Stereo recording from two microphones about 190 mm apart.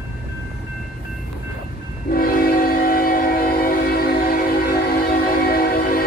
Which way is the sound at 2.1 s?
50° left (ahead or behind).